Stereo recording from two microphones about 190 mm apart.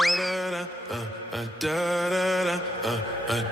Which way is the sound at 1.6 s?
Centre (ahead or behind).